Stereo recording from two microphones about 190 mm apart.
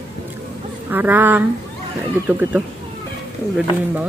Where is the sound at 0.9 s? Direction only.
10° right (ahead or behind).